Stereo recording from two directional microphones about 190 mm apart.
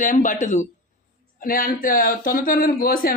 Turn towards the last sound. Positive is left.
turn(degrees=50)  # may be behind; listen again after turning